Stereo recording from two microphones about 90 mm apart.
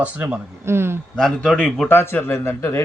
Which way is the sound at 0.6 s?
30° right (ahead or behind).